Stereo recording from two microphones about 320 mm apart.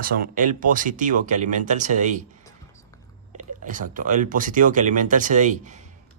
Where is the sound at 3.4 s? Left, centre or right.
Right.